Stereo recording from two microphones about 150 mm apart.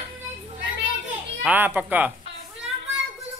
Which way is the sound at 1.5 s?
10° right (ahead or behind).